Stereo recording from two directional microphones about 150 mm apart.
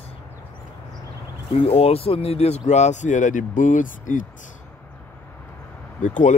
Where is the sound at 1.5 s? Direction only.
40° left (ahead or behind); by 4.3 s 60° left (ahead or behind).